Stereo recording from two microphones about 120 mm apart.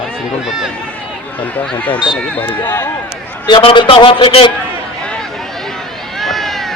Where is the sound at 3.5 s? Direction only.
45° left (ahead or behind).